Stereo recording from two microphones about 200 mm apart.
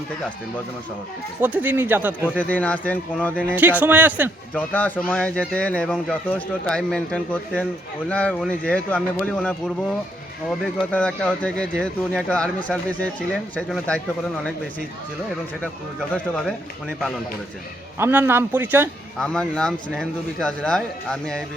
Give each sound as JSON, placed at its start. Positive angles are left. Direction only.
{"t": 1.4, "sound": "speech", "side_deg": -10}
{"t": 2.4, "sound": "speech", "side_deg": 10}
{"t": 3.4, "sound": "speech", "side_deg": -10}
{"t": 4.5, "sound": "speech", "side_deg": 10}
{"t": 10.9, "sound": "speech", "side_deg": 5}
{"t": 16.1, "sound": "speech", "side_deg": 5}
{"t": 17.9, "sound": "speech", "side_deg": -10}
{"t": 19.2, "sound": "speech", "side_deg": 5}